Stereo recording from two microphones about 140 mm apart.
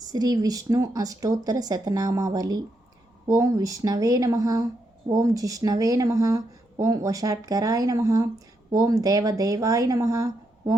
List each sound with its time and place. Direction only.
0.0 s speech: 25° right (ahead or behind)